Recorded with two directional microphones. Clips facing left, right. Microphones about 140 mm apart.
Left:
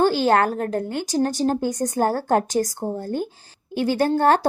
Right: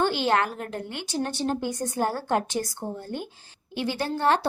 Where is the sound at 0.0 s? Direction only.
40° left (ahead or behind).